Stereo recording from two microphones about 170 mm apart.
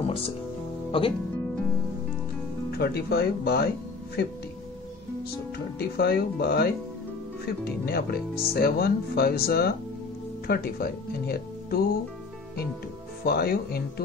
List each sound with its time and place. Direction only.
0.0 s music: 35° left (ahead or behind)
0.9 s speech: 30° left (ahead or behind)
2.8 s speech: 70° left (ahead or behind)
5.8 s speech: 70° left (ahead or behind)
13.2 s speech: 65° left (ahead or behind)